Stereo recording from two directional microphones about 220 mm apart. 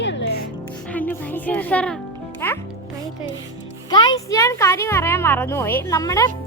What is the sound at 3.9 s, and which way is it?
Speech, 15° left (ahead or behind).